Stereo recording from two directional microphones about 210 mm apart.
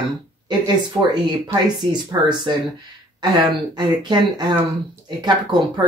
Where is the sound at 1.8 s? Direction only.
20° right (ahead or behind).